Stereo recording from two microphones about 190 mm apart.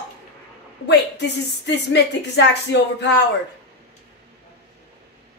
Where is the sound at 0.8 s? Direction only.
65° left (ahead or behind).